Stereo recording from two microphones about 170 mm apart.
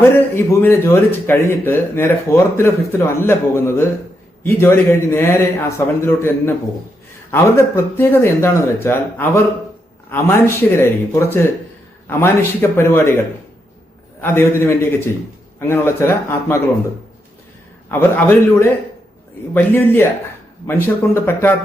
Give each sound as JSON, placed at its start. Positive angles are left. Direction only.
{"t": 0.0, "sound": "speech", "side_deg": 15}
{"t": 17.9, "sound": "speech", "side_deg": 10}